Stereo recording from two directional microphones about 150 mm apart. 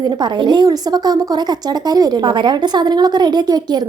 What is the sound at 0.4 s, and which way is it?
A woman's voice, 30° right (ahead or behind).